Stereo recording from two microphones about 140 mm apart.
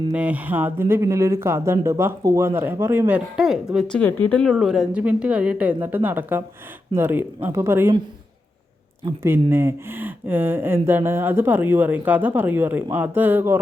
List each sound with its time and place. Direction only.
0.1 s speech: 10° right (ahead or behind)
3.3 s a woman's voice: 5° right (ahead or behind)
3.9 s speech: 10° left (ahead or behind); by 7.9 s 20° right (ahead or behind)
9.2 s speech: 15° right (ahead or behind)